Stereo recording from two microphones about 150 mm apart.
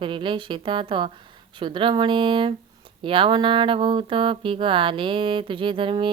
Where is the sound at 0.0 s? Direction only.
35° right (ahead or behind).